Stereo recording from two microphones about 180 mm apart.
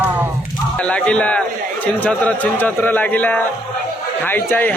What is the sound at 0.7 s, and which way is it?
Speech, 5° left (ahead or behind).